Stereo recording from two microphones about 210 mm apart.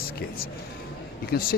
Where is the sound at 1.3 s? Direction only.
45° left (ahead or behind).